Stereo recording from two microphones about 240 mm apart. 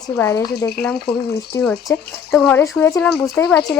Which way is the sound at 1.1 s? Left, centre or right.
Left.